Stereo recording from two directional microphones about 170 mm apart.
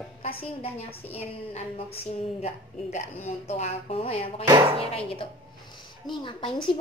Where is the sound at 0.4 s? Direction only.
35° left (ahead or behind).